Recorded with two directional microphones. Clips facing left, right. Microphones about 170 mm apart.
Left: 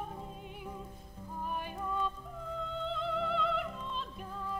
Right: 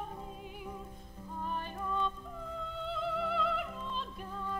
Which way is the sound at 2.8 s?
5° right (ahead or behind).